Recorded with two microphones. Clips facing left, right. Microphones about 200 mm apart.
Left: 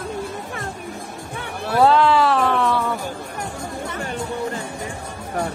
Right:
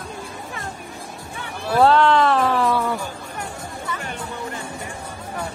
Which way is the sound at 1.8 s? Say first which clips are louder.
Even; 5° left (ahead or behind).